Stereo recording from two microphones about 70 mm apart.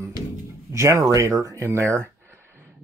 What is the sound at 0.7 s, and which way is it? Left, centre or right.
Speech, right.